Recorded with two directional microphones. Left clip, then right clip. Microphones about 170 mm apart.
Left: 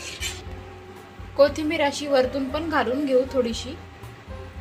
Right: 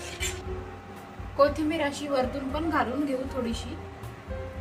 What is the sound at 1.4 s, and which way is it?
A woman's voice, 40° left (ahead or behind).